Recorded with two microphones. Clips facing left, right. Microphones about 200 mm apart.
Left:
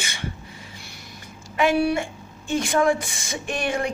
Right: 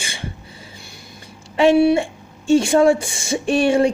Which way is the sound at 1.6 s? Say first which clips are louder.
Right 7 dB; 25° right (ahead or behind).